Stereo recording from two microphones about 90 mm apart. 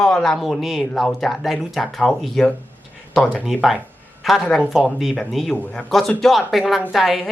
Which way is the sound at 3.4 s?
Centre (ahead or behind).